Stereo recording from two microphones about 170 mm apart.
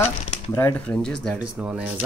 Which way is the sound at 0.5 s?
10° left (ahead or behind).